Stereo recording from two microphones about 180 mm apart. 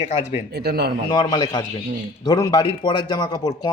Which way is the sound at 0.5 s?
65° right (ahead or behind).